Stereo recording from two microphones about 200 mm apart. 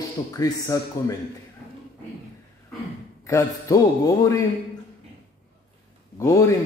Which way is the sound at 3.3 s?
15° left (ahead or behind).